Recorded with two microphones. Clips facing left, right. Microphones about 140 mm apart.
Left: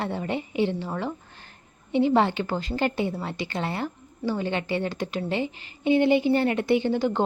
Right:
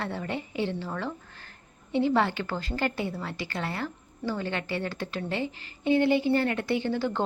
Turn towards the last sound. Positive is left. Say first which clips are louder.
# left 5 dB
turn(degrees=15)  # may be behind; listen again after turning